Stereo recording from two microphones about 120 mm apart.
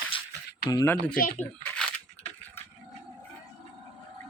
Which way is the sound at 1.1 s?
10° left (ahead or behind).